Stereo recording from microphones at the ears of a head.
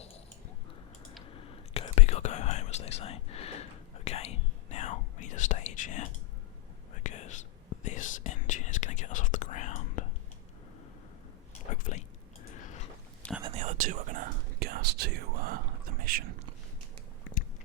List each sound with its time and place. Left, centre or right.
1.3 s whispering: left
11.7 s a sound: left
13.4 s whispering: right